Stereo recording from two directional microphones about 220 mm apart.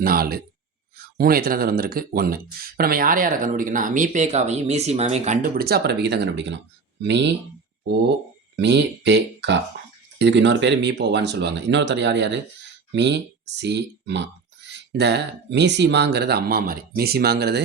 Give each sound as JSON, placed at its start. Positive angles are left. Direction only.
{"t": 0.0, "sound": "speech", "side_deg": -45}
{"t": 8.5, "sound": "speech", "side_deg": -50}